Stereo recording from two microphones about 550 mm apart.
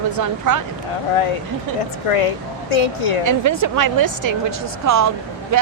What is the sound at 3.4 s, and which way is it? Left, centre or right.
Speech, right.